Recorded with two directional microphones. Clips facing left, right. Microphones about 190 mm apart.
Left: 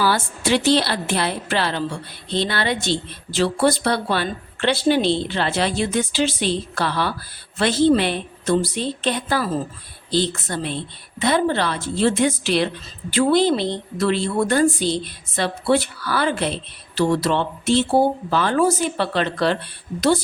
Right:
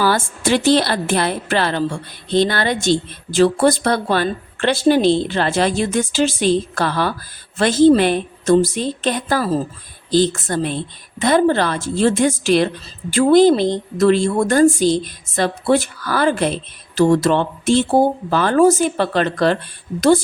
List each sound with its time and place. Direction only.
0.0 s a woman's voice: 45° right (ahead or behind)